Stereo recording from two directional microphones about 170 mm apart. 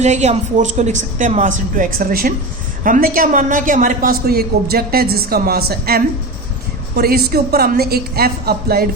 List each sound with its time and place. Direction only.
0.0 s a woman's voice: 40° right (ahead or behind); by 8.9 s 65° right (ahead or behind)